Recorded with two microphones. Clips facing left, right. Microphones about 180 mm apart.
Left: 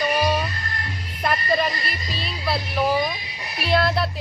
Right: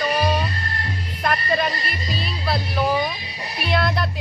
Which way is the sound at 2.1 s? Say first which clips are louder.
Right 1 dB; centre (ahead or behind).